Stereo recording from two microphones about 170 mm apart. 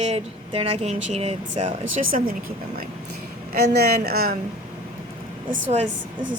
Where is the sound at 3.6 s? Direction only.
70° right (ahead or behind).